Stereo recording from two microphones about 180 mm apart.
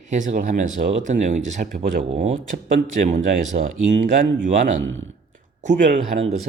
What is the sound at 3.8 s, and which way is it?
Speech, 45° right (ahead or behind).